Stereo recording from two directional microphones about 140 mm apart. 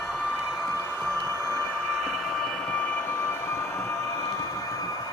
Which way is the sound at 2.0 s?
Centre (ahead or behind).